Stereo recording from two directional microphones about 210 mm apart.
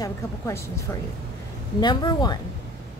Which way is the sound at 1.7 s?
20° left (ahead or behind).